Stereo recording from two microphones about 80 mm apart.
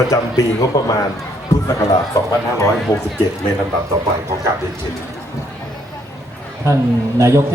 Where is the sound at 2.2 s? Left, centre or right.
Left.